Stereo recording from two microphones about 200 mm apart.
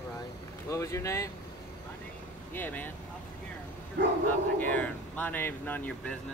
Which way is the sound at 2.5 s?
10° left (ahead or behind).